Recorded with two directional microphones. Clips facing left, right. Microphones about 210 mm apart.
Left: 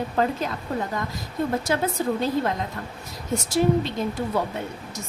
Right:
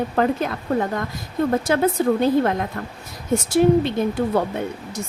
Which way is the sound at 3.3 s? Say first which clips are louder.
Right 5 dB; 55° right (ahead or behind).